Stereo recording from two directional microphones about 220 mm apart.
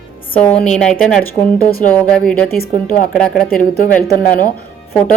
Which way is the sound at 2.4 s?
45° left (ahead or behind).